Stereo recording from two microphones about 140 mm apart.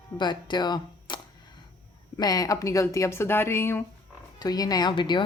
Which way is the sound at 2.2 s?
25° left (ahead or behind).